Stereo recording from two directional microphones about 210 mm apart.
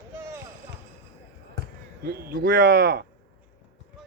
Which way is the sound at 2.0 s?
50° right (ahead or behind).